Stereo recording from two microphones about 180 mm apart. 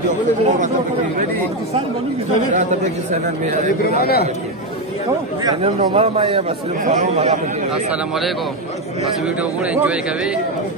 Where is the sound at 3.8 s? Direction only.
60° left (ahead or behind).